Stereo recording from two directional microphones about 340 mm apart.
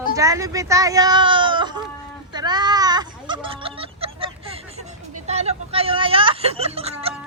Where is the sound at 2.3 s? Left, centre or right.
Centre.